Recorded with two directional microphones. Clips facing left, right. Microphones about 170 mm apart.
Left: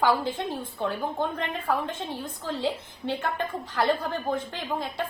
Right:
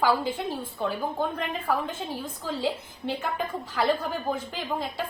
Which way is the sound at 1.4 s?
Centre (ahead or behind).